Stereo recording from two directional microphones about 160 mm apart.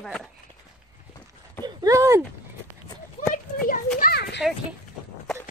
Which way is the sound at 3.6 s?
65° left (ahead or behind).